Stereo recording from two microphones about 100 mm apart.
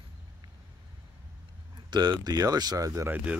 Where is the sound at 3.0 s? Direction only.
15° right (ahead or behind).